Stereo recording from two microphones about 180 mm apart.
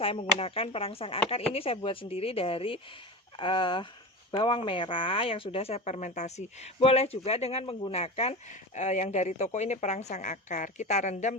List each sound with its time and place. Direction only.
0.0 s speech: 30° left (ahead or behind)